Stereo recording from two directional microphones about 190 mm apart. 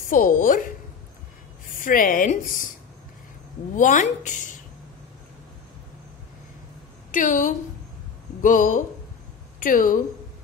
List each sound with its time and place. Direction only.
0.1 s a woman's voice: 45° left (ahead or behind)
1.8 s a woman's voice: 45° left (ahead or behind)
3.7 s a woman's voice: 45° left (ahead or behind)
7.1 s a woman's voice: 45° left (ahead or behind)